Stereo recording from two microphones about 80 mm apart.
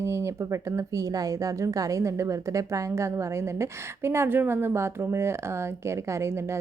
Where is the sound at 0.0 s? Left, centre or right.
Right.